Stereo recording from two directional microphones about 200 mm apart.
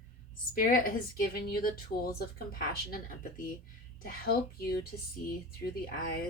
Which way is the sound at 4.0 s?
50° left (ahead or behind).